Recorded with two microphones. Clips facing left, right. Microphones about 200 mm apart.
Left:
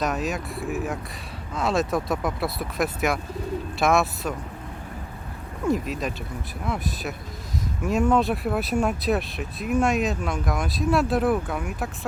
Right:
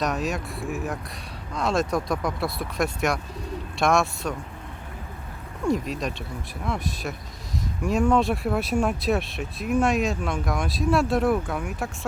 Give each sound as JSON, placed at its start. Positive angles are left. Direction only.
{"t": 0.0, "sound": "speech", "side_deg": 0}
{"t": 5.6, "sound": "speech", "side_deg": 0}